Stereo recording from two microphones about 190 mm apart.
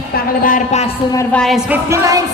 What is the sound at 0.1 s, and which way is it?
Speech, 45° left (ahead or behind).